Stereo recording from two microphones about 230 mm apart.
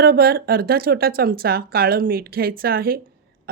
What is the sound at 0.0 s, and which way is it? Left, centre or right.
A woman's voice, right.